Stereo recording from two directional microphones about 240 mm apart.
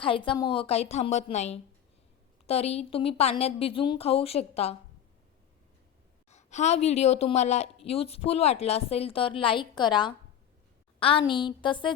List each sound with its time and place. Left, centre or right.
0.0 s speech: left
6.3 s a sound: left
6.8 s speech: left